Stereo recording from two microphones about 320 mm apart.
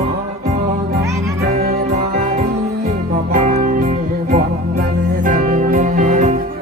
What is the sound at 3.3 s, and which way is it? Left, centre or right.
Music, right.